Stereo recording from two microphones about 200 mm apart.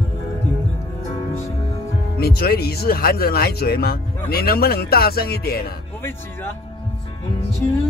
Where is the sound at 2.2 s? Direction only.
50° left (ahead or behind).